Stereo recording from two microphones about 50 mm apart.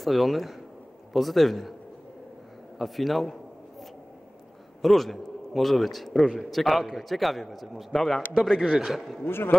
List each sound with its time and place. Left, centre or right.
0.0 s a man's voice: centre
2.8 s a man's voice: centre
4.8 s a man's voice: centre
8.7 s a man's voice: centre
9.2 s a man's voice: left